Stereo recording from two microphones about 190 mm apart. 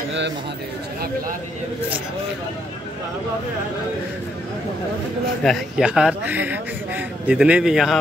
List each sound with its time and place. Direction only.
5.4 s speech: centre (ahead or behind)